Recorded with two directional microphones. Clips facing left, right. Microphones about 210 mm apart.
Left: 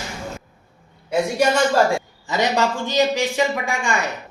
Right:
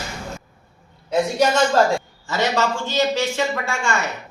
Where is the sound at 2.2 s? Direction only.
15° left (ahead or behind).